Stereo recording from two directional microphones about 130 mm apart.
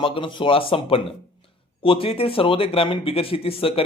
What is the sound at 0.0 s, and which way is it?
A man's voice, 40° left (ahead or behind).